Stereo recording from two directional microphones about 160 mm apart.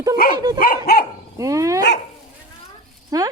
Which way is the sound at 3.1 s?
20° right (ahead or behind).